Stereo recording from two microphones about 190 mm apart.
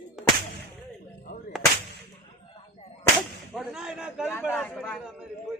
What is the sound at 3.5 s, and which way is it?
Speech, centre (ahead or behind).